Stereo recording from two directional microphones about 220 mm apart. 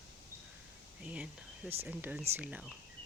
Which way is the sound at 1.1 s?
5° right (ahead or behind).